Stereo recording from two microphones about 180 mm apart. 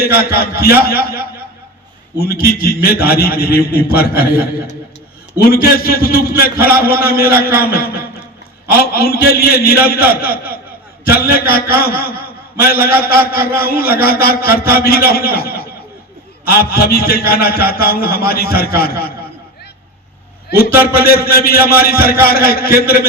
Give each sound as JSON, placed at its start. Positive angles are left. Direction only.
{"t": 0.0, "sound": "a man's voice", "side_deg": 60}
{"t": 20.5, "sound": "a man's voice", "side_deg": 60}